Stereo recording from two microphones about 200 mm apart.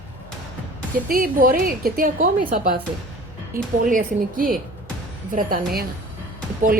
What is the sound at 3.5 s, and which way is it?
A woman's voice, 45° right (ahead or behind).